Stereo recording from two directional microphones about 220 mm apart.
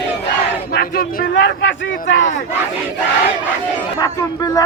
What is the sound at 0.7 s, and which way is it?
Speech, 40° left (ahead or behind).